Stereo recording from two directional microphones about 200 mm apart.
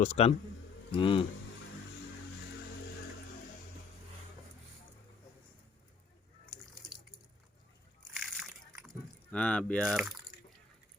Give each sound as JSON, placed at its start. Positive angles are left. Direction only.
{"t": 0.0, "sound": "a man's voice", "side_deg": 35}
{"t": 8.1, "sound": "a sound", "side_deg": 0}
{"t": 9.3, "sound": "speech", "side_deg": 5}